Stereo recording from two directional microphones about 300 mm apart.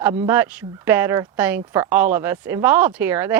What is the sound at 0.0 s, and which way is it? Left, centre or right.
Speech, centre.